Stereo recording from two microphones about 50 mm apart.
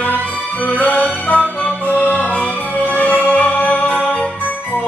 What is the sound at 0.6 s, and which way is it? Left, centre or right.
Music, left.